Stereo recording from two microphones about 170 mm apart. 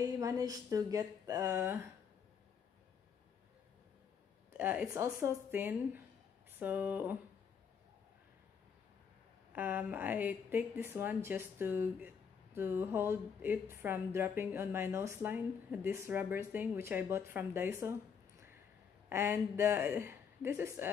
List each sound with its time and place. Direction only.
0.0 s a woman's voice: 20° right (ahead or behind)
4.6 s a woman's voice: 10° right (ahead or behind)
9.5 s a woman's voice: 10° right (ahead or behind)
19.0 s a woman's voice: 15° right (ahead or behind)